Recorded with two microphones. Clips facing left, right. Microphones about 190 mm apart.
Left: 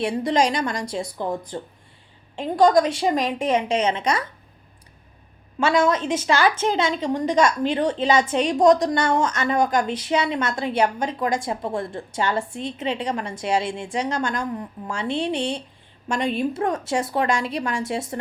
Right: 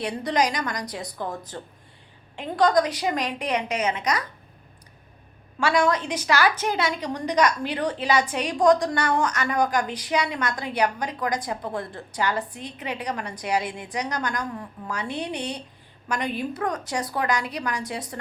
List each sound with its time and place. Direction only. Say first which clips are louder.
0.0 s a woman's voice: left 4 dB; 25° left (ahead or behind)
2.6 s a woman's voice: left 4 dB; 25° left (ahead or behind)
5.5 s a woman's voice: left 2 dB; 20° left (ahead or behind)